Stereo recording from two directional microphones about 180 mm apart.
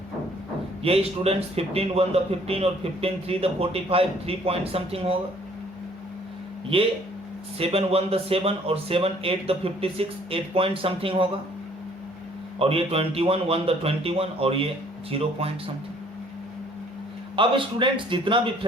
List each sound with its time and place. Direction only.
0.8 s a man's voice: 35° right (ahead or behind)
6.7 s a man's voice: 30° right (ahead or behind)
12.5 s a man's voice: 30° right (ahead or behind)
17.3 s a man's voice: 30° right (ahead or behind)